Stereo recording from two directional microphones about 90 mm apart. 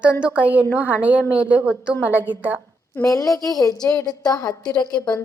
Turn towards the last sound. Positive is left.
turn(degrees=50)  # may be behind; listen again after turning